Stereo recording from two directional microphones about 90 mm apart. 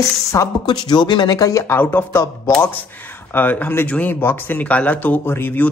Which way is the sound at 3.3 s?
20° left (ahead or behind).